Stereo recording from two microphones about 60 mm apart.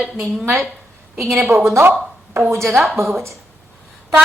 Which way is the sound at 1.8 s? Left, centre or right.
Right.